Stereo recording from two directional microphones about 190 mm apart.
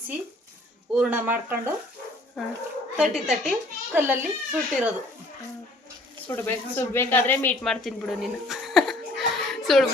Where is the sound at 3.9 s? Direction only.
10° right (ahead or behind).